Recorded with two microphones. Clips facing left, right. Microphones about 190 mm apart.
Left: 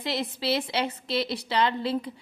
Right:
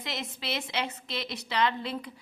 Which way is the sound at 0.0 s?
30° left (ahead or behind).